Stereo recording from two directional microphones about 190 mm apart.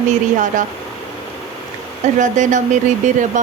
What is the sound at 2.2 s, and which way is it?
Speech, 40° right (ahead or behind).